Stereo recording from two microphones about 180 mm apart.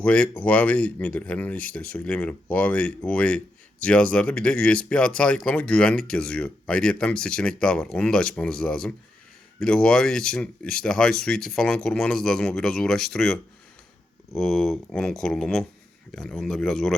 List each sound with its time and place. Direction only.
0.0 s speech: 5° left (ahead or behind)